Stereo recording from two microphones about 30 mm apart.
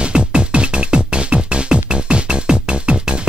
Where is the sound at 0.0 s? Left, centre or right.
Right.